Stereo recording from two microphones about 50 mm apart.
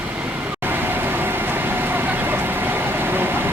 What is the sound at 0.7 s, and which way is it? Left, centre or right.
Vehicle, right.